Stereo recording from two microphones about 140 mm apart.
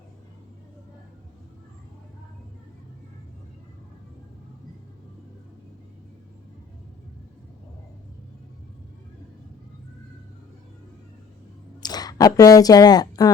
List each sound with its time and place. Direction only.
11.8 s speech: 30° left (ahead or behind)